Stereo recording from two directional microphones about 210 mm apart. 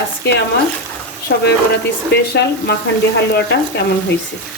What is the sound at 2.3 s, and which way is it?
Speech, 50° left (ahead or behind).